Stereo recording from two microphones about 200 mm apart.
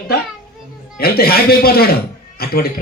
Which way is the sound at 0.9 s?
50° left (ahead or behind).